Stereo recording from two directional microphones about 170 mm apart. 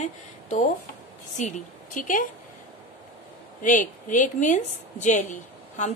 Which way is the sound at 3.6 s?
50° left (ahead or behind).